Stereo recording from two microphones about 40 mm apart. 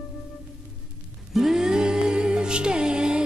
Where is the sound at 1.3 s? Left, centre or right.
Centre.